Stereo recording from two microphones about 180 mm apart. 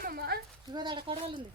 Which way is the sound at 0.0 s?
55° right (ahead or behind).